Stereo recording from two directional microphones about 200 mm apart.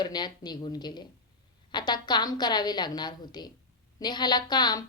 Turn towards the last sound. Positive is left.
turn(degrees=20)  # may be behind; listen again after turning